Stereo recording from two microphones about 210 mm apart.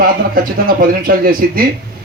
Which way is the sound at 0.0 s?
45° right (ahead or behind).